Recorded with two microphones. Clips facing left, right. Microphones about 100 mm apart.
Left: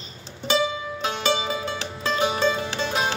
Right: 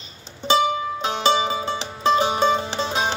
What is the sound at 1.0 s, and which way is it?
Music, 25° right (ahead or behind).